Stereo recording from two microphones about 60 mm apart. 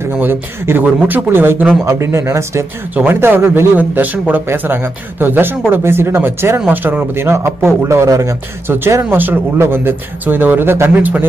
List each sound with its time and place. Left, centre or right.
0.2 s speech: right
1.9 s speech: right
3.1 s speech: right
3.7 s a man's voice: right
4.5 s speech: right
7.2 s a man's voice: right
8.1 s speech: right
8.6 s speech: right